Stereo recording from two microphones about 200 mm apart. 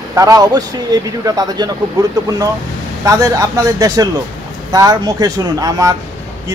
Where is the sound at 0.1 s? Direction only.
15° right (ahead or behind).